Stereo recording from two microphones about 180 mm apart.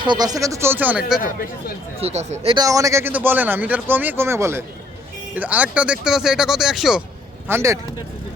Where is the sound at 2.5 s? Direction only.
20° right (ahead or behind); by 7.0 s 5° right (ahead or behind).